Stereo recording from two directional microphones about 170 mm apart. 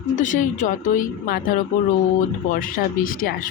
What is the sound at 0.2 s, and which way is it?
A woman's voice, 50° left (ahead or behind).